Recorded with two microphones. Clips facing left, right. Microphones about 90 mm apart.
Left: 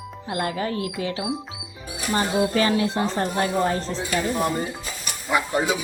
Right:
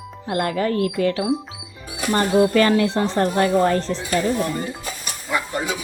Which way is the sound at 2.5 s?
70° right (ahead or behind).